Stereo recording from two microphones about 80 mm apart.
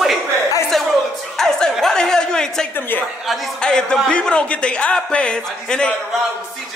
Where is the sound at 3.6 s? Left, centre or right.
Centre.